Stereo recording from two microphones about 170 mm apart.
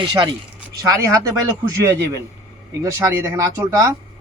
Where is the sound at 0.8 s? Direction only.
20° right (ahead or behind).